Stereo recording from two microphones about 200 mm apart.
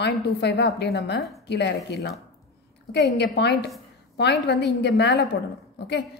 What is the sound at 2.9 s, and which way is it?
A woman's voice, 55° left (ahead or behind).